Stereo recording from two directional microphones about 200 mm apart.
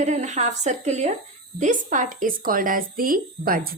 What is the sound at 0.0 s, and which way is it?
Speech, 35° right (ahead or behind).